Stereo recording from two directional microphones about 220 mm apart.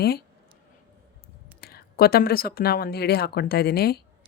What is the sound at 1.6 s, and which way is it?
Speech, 45° left (ahead or behind).